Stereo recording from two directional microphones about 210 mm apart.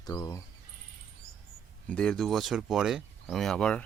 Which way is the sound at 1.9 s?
5° left (ahead or behind).